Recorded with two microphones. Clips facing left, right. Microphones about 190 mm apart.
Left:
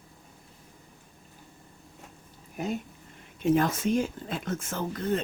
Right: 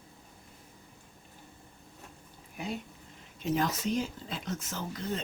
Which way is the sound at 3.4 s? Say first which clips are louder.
Left 6 dB; 50° left (ahead or behind).